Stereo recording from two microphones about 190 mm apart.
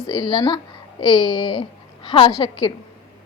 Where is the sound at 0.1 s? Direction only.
25° left (ahead or behind).